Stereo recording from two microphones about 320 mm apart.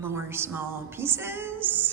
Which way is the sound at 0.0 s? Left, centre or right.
Centre.